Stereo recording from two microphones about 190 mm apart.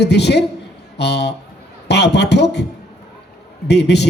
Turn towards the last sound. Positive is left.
turn(degrees=65)  # may be behind; listen again after turning